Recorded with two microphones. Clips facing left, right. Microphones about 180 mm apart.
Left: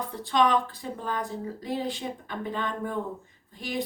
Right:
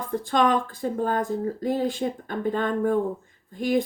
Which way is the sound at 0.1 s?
50° right (ahead or behind).